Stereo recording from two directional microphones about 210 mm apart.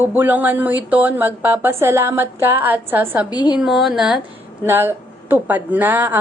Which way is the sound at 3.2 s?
20° left (ahead or behind).